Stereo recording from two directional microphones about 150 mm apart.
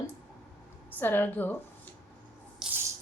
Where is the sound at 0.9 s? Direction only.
15° left (ahead or behind).